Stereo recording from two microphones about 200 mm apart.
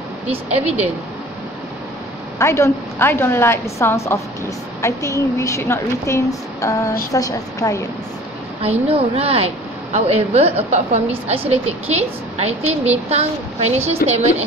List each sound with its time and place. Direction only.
0.3 s a woman's voice: 30° right (ahead or behind)
2.3 s a woman's voice: 15° left (ahead or behind)
8.8 s a woman's voice: 30° right (ahead or behind)